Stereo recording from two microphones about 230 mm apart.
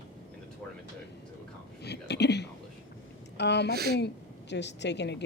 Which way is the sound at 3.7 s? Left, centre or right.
Right.